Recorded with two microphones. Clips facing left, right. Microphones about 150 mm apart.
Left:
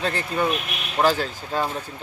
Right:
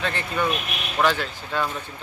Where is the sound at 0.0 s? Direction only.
35° left (ahead or behind).